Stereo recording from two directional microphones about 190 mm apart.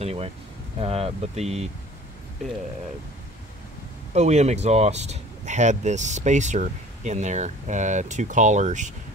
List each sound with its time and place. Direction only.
0.0 s speech: 30° right (ahead or behind)
4.1 s speech: 35° right (ahead or behind)